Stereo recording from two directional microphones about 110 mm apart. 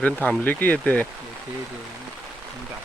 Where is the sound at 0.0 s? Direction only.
15° left (ahead or behind).